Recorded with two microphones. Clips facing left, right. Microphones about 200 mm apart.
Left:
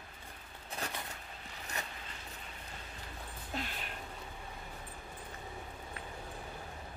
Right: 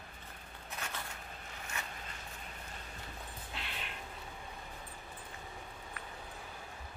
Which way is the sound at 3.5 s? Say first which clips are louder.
Left 6 dB; 40° left (ahead or behind).